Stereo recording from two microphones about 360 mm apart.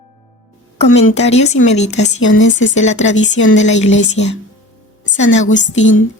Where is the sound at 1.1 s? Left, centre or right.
Centre.